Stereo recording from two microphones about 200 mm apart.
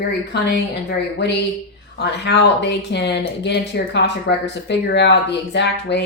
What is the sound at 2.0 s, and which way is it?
Speech, 60° left (ahead or behind).